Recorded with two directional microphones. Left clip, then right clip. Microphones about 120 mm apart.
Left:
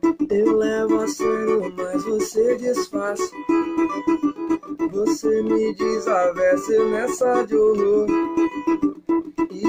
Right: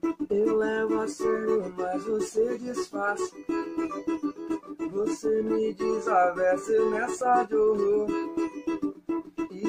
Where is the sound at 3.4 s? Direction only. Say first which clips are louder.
Left 12 dB; 35° left (ahead or behind).